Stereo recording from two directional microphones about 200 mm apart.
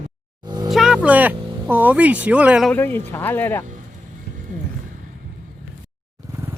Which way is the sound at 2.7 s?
10° left (ahead or behind).